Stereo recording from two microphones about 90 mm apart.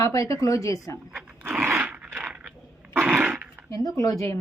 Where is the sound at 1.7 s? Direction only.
20° right (ahead or behind).